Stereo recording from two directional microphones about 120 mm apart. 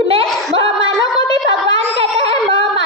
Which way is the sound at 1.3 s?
50° right (ahead or behind).